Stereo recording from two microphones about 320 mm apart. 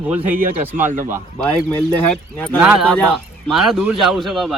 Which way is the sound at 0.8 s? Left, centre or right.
Right.